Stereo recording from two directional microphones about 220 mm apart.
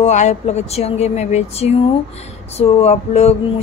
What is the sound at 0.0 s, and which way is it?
Speech, 30° left (ahead or behind).